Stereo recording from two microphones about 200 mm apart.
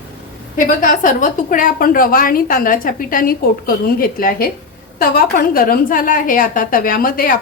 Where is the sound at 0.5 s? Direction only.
40° left (ahead or behind).